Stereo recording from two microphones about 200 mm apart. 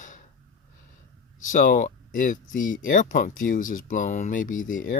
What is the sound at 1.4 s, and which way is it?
Speech, 40° left (ahead or behind).